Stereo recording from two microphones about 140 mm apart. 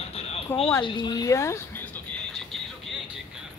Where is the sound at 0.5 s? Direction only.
15° left (ahead or behind).